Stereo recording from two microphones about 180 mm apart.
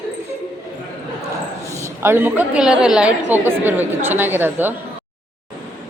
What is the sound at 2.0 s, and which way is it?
Speech, 10° right (ahead or behind).